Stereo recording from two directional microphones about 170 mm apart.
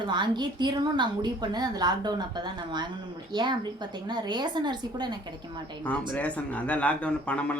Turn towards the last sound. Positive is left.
turn(degrees=5)  # may be behind; listen again after turning